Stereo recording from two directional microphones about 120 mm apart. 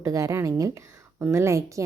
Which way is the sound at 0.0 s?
25° right (ahead or behind).